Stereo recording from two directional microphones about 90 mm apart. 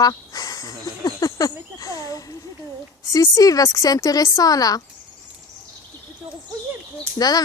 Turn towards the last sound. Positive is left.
turn(degrees=45)  # may be behind; listen again after turning